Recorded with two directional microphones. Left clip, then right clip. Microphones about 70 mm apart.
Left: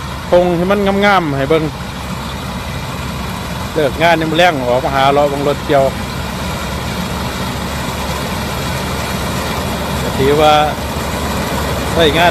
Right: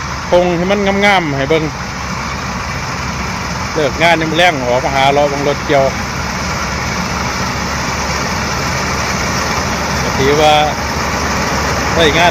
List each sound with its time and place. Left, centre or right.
0.3 s speech: left
3.8 s speech: left
10.2 s speech: left
11.3 s vehicle: centre
11.9 s speech: left